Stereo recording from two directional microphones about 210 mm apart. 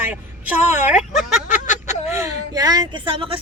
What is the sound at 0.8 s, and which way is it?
Speech, 35° left (ahead or behind).